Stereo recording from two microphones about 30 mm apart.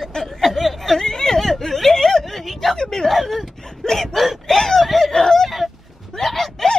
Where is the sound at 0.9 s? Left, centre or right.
Centre.